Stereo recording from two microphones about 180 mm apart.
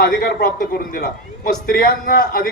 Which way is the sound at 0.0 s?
60° left (ahead or behind).